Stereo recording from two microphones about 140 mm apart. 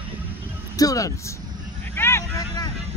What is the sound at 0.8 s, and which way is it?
Speech, 25° left (ahead or behind).